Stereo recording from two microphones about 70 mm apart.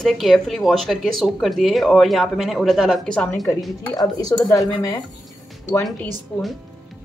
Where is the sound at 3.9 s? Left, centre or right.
Left.